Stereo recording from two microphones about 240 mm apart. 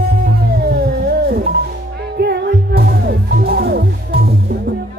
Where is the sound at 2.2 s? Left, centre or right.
Right.